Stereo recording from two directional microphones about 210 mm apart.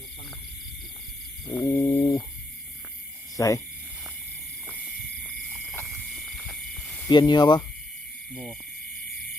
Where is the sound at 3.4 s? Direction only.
15° left (ahead or behind).